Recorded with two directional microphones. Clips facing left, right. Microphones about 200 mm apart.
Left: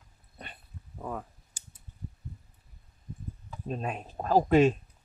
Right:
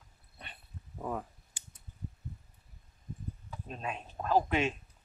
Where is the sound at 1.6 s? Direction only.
40° left (ahead or behind).